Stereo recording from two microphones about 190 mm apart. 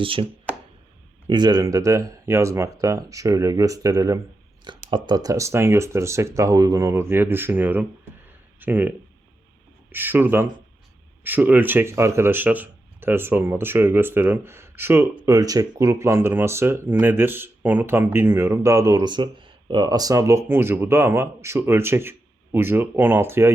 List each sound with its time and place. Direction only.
0.0 s speech: 30° right (ahead or behind)
1.3 s speech: 20° right (ahead or behind)
9.9 s speech: 10° right (ahead or behind)